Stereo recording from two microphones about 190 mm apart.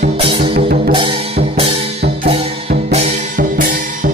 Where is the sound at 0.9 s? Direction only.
30° right (ahead or behind).